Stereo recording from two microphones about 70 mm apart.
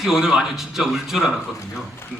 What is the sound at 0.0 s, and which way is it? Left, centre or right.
A man's voice, centre.